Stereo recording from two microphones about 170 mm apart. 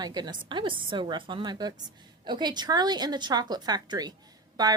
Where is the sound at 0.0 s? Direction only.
25° right (ahead or behind).